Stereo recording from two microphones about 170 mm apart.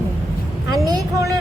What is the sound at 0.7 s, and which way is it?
Speech, 20° right (ahead or behind).